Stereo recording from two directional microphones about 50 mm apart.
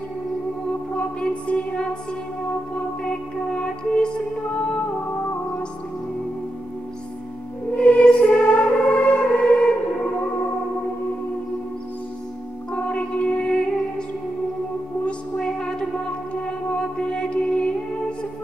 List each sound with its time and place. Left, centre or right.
0.9 s music: left
7.7 s music: left
8.5 s music: left
9.4 s music: centre
12.7 s music: left
15.0 s music: centre